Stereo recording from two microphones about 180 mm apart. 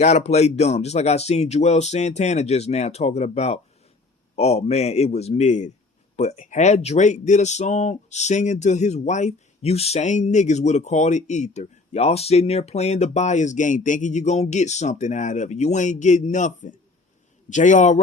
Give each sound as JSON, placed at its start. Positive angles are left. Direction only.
{"t": 0.0, "sound": "a man's voice", "side_deg": 35}